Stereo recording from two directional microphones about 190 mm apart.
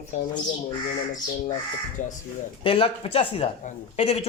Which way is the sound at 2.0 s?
45° left (ahead or behind).